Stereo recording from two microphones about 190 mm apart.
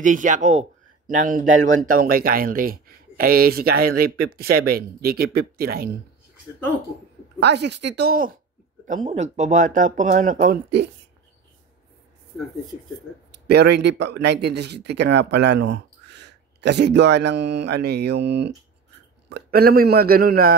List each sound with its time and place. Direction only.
0.0 s speech: 45° right (ahead or behind)
7.3 s speech: 60° right (ahead or behind); by 10.6 s 45° right (ahead or behind)
13.3 s speech: 60° right (ahead or behind)